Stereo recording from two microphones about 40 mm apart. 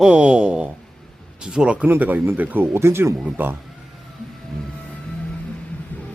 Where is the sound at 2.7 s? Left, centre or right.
Right.